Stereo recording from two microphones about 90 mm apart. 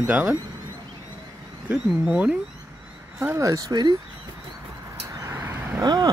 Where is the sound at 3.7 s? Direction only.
50° right (ahead or behind).